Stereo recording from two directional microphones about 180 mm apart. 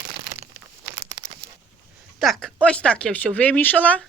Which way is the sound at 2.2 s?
Centre (ahead or behind).